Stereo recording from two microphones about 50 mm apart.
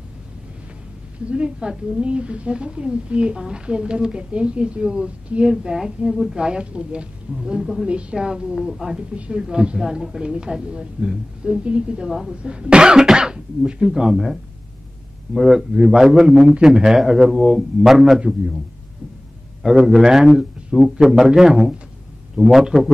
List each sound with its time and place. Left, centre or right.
1.3 s a woman's voice: centre
6.1 s a man's voice: centre
6.4 s a woman's voice: centre
9.1 s a woman's voice: right; by 18.2 s centre
19.9 s a woman's voice: centre